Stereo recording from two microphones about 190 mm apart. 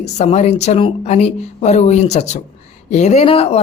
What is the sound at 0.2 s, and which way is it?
Speech, 35° left (ahead or behind).